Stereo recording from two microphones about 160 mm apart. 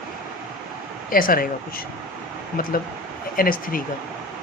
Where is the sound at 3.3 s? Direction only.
60° left (ahead or behind).